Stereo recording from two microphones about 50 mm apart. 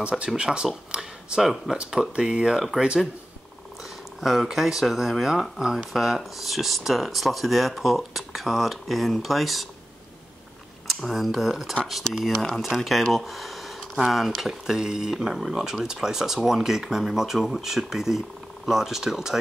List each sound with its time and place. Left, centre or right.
0.4 s speech: centre
4.2 s speech: centre
10.9 s speech: centre